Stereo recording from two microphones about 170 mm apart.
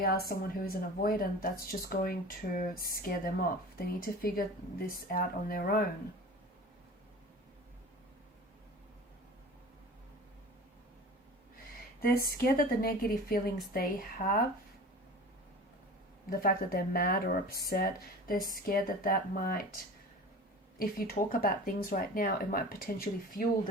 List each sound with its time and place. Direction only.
0.3 s speech: 65° left (ahead or behind)
11.9 s speech: 60° left (ahead or behind)
16.3 s speech: 60° left (ahead or behind)